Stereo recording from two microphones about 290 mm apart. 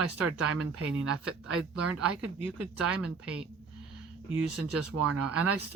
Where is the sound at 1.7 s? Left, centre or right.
Right.